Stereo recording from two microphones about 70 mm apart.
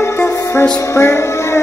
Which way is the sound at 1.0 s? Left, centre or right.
Left.